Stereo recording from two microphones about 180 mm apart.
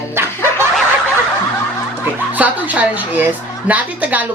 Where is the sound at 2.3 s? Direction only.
10° right (ahead or behind).